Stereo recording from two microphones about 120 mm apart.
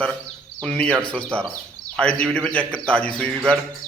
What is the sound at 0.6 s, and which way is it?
A man's voice, 10° left (ahead or behind).